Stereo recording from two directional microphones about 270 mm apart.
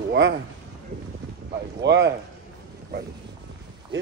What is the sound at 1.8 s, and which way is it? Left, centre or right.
Speech, right.